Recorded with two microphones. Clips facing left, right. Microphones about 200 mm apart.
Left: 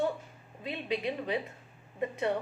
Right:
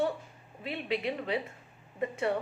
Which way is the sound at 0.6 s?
20° left (ahead or behind).